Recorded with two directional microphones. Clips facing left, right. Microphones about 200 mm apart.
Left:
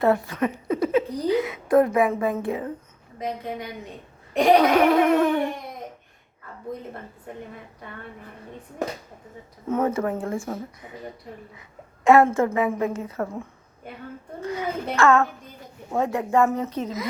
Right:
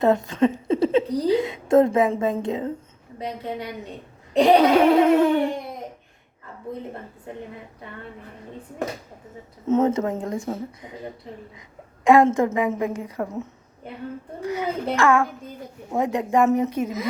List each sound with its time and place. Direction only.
0.0 s a woman's voice: 20° right (ahead or behind)
9.6 s speech: 25° right (ahead or behind)
12.0 s a woman's voice: 15° right (ahead or behind)
14.9 s a woman's voice: 10° right (ahead or behind)